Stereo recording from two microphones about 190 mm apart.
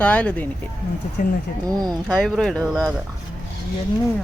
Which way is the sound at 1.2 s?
45° left (ahead or behind).